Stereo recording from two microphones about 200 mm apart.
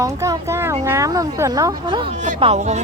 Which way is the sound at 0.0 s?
15° right (ahead or behind).